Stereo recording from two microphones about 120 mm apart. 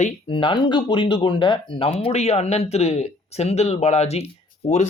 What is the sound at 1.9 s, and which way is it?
Speech, 55° left (ahead or behind).